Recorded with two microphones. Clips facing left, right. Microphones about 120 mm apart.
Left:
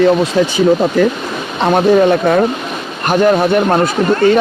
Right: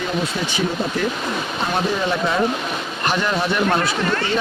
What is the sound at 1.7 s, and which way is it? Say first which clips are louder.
Speech: left 13 dB; 55° left (ahead or behind).